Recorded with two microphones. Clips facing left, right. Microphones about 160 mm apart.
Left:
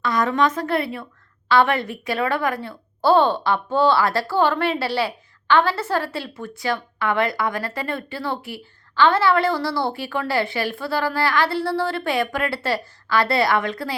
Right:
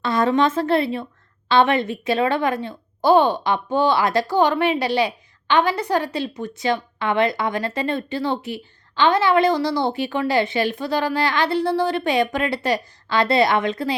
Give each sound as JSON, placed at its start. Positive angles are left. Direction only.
{"t": 0.0, "sound": "a woman's voice", "side_deg": -25}